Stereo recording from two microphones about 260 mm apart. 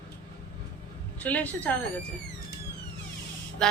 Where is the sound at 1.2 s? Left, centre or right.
Centre.